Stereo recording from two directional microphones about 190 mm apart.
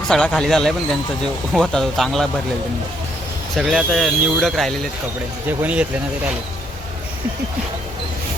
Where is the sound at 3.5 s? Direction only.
Centre (ahead or behind).